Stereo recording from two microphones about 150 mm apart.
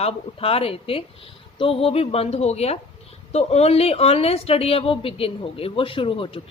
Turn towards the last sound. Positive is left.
turn(degrees=35)  # may be behind; listen again after turning